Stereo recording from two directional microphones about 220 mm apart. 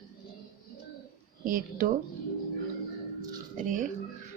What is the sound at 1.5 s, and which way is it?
Speech, 40° right (ahead or behind).